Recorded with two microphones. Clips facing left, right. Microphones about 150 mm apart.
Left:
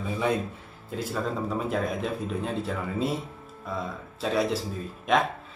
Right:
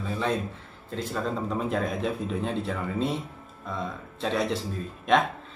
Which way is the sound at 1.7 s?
Centre (ahead or behind).